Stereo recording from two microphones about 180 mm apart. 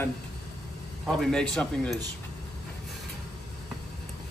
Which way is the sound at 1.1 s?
5° left (ahead or behind).